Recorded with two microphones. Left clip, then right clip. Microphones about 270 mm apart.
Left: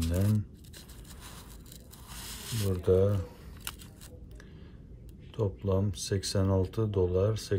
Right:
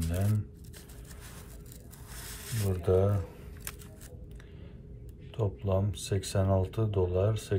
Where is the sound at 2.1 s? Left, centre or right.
Centre.